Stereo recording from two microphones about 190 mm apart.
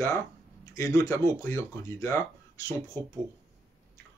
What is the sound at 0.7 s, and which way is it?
Speech, 15° left (ahead or behind).